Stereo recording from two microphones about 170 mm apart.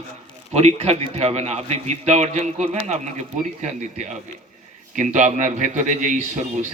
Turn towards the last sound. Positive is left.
turn(degrees=-45)  # may be behind; listen again after turning